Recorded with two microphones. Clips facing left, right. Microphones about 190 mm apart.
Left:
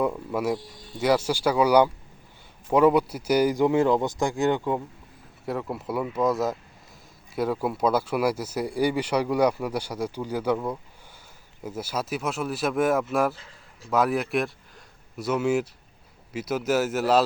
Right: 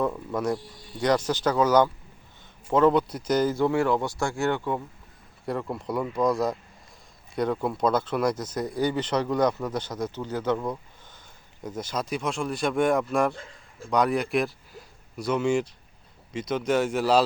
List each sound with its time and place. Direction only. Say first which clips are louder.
0.0 s speech: left 1 dB; 5° left (ahead or behind)
5.5 s speech: even; 5° left (ahead or behind)